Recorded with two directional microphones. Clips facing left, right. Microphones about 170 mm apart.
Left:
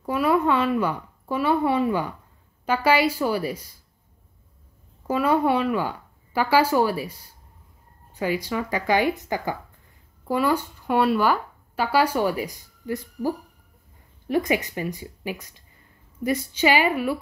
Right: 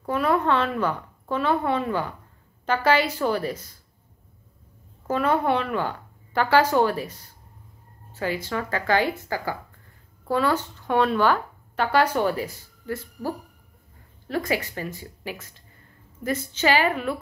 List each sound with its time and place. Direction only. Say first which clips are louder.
0.0 s a woman's voice: left 1 dB; 10° left (ahead or behind)
5.0 s a woman's voice: left 2 dB; 10° left (ahead or behind)